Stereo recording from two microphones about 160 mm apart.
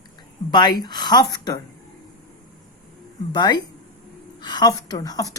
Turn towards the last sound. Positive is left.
turn(degrees=20)  # may be behind; listen again after turning